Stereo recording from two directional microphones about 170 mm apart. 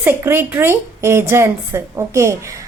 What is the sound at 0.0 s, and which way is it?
A woman's voice, 15° right (ahead or behind).